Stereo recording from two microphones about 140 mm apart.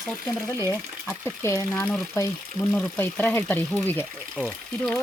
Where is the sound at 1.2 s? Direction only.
20° left (ahead or behind).